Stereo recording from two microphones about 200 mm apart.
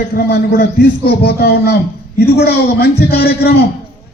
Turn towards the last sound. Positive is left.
turn(degrees=50)  # may be behind; listen again after turning